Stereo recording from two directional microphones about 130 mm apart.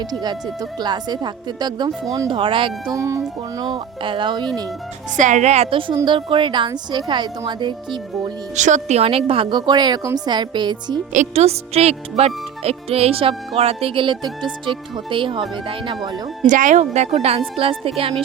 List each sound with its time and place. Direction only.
0.0 s speech: 30° right (ahead or behind)
2.3 s speech: 40° right (ahead or behind)
2.9 s speech: 25° right (ahead or behind)
5.1 s a woman's voice: 70° right (ahead or behind)
6.1 s speech: 40° right (ahead or behind)
8.5 s speech: 65° right (ahead or behind); by 11.0 s 35° right (ahead or behind)
11.1 s speech: 60° right (ahead or behind); by 16.0 s 40° right (ahead or behind)
16.5 s speech: 75° right (ahead or behind); by 18.1 s 45° right (ahead or behind)